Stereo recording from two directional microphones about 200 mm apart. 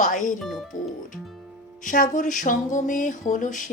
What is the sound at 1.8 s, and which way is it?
Speech, 40° left (ahead or behind).